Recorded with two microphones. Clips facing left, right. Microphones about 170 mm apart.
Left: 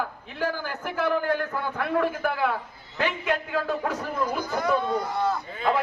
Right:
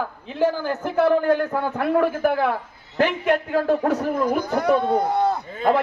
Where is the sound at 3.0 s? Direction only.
55° right (ahead or behind).